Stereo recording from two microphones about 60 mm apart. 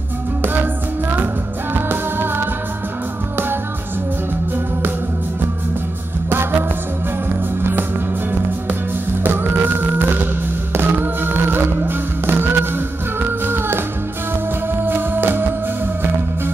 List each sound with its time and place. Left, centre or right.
1.1 s music: right
9.2 s music: right
14.9 s music: right